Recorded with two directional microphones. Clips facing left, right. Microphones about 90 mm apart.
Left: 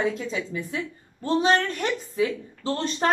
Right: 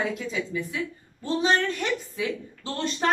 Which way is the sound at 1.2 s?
40° left (ahead or behind).